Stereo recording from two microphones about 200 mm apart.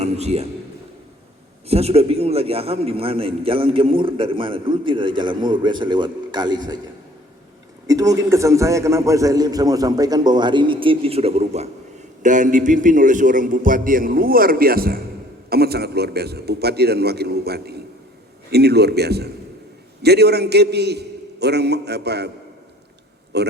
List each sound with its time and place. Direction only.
0.0 s a sound: 30° right (ahead or behind)
1.6 s a man's voice: 30° right (ahead or behind)
7.9 s a man's voice: 15° right (ahead or behind); by 22.3 s 55° right (ahead or behind)
23.3 s a man's voice: 55° right (ahead or behind)